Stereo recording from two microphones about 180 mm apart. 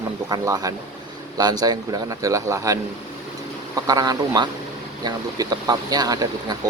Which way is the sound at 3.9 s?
20° right (ahead or behind).